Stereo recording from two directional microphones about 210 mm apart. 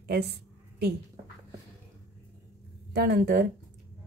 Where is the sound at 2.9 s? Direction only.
50° right (ahead or behind).